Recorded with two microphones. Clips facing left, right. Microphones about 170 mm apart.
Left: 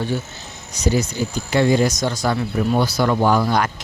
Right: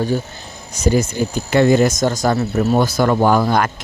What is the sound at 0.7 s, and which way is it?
Speech, 50° right (ahead or behind).